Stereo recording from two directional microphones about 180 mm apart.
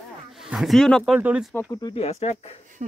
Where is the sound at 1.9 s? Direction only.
35° left (ahead or behind).